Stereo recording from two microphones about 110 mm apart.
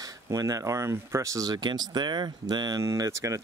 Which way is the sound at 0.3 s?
30° right (ahead or behind).